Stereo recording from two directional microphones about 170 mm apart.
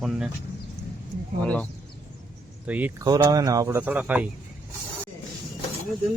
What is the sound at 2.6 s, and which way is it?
Speech, 10° right (ahead or behind).